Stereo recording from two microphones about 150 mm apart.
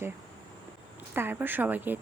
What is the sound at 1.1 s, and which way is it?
Speech, 15° right (ahead or behind).